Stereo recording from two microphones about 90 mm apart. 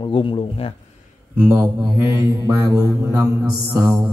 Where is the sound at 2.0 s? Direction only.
30° right (ahead or behind).